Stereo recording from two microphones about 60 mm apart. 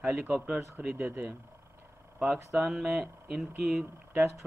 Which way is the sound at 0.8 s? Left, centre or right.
Right.